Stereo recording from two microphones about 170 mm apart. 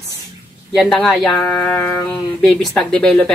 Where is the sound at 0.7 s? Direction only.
5° left (ahead or behind).